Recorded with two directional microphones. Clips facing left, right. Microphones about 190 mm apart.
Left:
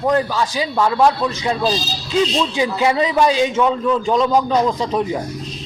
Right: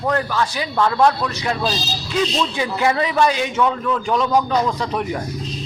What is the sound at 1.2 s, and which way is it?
A man's voice, 20° left (ahead or behind).